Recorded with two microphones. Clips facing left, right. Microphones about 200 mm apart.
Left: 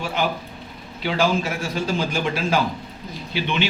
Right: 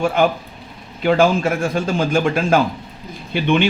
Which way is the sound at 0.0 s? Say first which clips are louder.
Right 8 dB; 50° right (ahead or behind).